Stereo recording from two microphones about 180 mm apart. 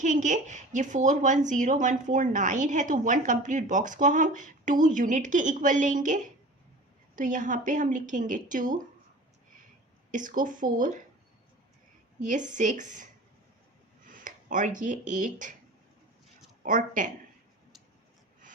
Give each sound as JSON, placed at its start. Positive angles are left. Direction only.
{"t": 0.0, "sound": "a woman's voice", "side_deg": -45}
{"t": 7.2, "sound": "a woman's voice", "side_deg": -45}
{"t": 10.1, "sound": "a woman's voice", "side_deg": -45}
{"t": 12.2, "sound": "a woman's voice", "side_deg": -45}
{"t": 14.1, "sound": "speech", "side_deg": -50}
{"t": 16.6, "sound": "a woman's voice", "side_deg": -45}